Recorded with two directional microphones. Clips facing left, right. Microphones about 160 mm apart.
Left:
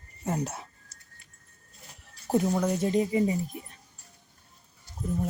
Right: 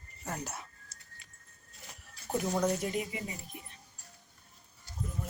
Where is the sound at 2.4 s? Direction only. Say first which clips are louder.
Left 3 dB; 5° left (ahead or behind).